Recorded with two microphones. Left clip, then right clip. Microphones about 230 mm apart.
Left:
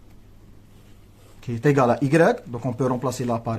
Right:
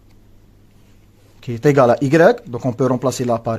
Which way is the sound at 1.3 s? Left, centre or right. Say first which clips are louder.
Right 6 dB; right.